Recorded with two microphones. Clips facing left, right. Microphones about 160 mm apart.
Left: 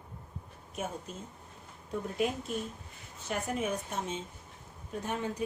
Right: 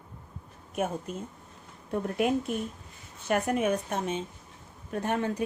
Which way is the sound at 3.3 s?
65° right (ahead or behind).